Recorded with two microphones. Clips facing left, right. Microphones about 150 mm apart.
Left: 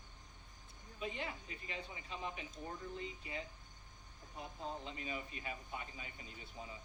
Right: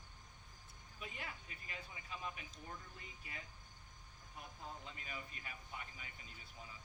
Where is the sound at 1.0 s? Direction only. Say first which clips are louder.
Left 7 dB; 25° left (ahead or behind).